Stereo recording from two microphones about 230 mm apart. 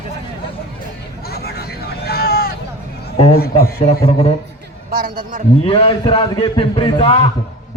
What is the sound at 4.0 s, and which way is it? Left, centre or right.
Speech, left.